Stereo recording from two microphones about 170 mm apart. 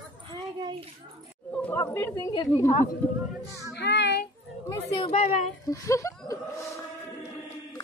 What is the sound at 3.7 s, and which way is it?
Child singing, 90° left.